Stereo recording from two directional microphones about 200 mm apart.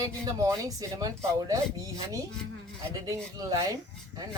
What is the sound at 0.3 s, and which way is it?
Speech, 15° right (ahead or behind).